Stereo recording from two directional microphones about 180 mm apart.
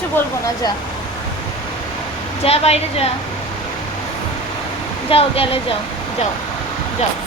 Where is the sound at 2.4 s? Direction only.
35° left (ahead or behind).